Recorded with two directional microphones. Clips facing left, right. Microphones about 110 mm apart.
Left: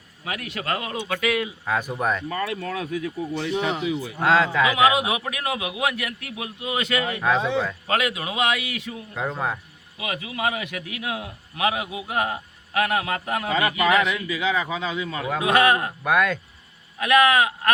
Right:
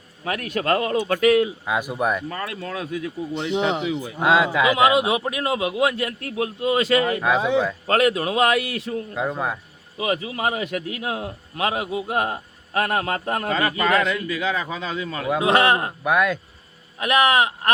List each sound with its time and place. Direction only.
0.3 s speech: 40° right (ahead or behind)
1.6 s speech: 10° right (ahead or behind)
2.6 s a man's voice: 30° right (ahead or behind); by 4.7 s 15° right (ahead or behind)
4.7 s a man's voice: 30° right (ahead or behind)
7.2 s speech: 10° right (ahead or behind)
7.9 s a man's voice: 40° right (ahead or behind)
9.1 s speech: 5° right (ahead or behind)
10.0 s a man's voice: 35° right (ahead or behind)
15.4 s a man's voice: 30° right (ahead or behind)
16.0 s speech: 5° right (ahead or behind)
17.0 s a man's voice: 25° right (ahead or behind)